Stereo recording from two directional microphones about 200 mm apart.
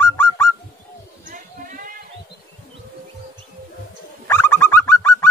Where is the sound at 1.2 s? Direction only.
40° right (ahead or behind).